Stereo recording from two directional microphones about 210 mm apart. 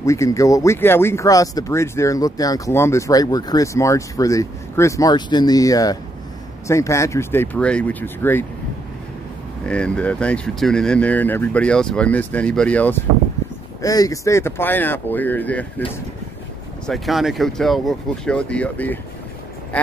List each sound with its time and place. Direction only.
0.0 s speech: 15° left (ahead or behind)
9.7 s speech: 5° left (ahead or behind)
16.8 s speech: centre (ahead or behind)